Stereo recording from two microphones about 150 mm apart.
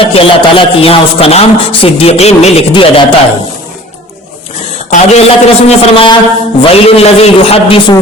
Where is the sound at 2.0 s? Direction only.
45° left (ahead or behind).